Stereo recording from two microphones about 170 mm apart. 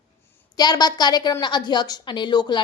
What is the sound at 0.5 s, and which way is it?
A woman's voice, 25° left (ahead or behind).